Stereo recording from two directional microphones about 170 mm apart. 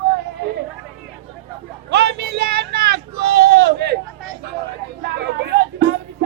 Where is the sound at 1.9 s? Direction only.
75° right (ahead or behind).